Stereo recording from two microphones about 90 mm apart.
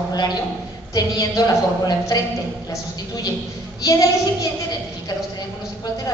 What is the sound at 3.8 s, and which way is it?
Speech, 40° left (ahead or behind).